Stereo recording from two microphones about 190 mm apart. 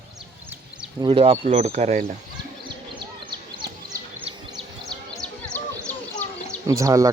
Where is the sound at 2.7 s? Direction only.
25° right (ahead or behind).